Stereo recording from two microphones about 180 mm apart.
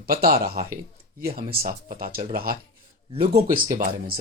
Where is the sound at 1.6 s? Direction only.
55° right (ahead or behind).